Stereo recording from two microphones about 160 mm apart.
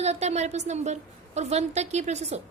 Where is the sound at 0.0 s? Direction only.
40° right (ahead or behind).